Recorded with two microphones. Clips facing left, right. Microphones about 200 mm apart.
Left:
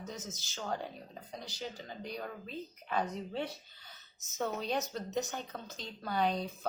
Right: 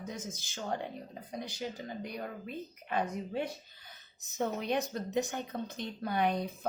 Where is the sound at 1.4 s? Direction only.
55° right (ahead or behind).